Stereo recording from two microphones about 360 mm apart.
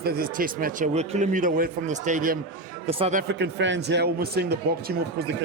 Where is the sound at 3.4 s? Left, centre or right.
Right.